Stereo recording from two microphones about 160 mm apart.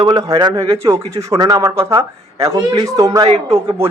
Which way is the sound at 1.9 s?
35° right (ahead or behind).